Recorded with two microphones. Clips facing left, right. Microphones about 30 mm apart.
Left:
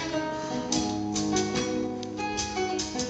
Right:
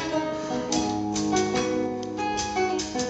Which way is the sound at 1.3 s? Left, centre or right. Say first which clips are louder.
Right 5 dB; centre.